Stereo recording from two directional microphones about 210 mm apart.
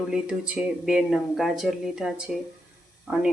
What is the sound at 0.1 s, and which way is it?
Speech, 5° right (ahead or behind).